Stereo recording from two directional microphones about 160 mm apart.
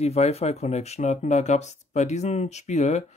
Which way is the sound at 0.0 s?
40° left (ahead or behind).